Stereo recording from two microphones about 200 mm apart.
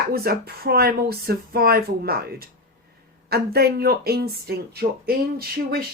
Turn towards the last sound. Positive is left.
turn(degrees=-50)  # may be behind; listen again after turning